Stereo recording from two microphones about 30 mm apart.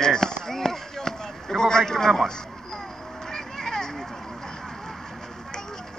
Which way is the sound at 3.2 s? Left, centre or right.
Centre.